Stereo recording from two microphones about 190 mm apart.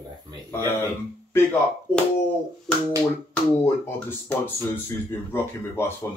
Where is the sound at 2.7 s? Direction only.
5° left (ahead or behind).